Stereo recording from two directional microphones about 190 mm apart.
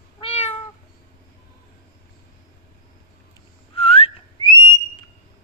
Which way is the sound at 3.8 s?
30° left (ahead or behind).